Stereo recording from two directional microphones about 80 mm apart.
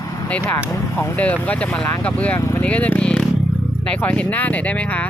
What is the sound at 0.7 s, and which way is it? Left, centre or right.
Speech, left.